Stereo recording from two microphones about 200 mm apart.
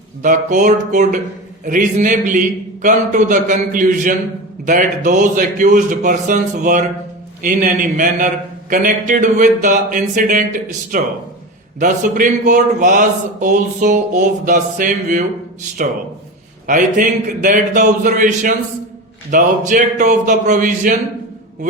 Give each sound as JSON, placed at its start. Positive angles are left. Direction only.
{"t": 0.2, "sound": "a man's voice", "side_deg": -40}
{"t": 16.6, "sound": "a man's voice", "side_deg": -40}